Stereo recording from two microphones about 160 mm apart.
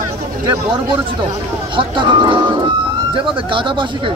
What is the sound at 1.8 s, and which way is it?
Speech, 30° right (ahead or behind).